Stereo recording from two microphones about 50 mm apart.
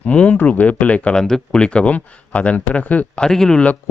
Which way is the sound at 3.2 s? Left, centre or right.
Centre.